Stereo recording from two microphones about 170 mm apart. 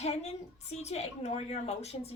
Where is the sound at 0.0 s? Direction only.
40° left (ahead or behind).